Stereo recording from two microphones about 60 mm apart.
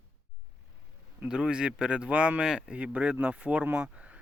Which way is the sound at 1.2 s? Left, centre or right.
Centre.